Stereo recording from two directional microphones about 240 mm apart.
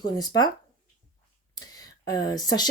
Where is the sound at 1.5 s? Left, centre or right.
Centre.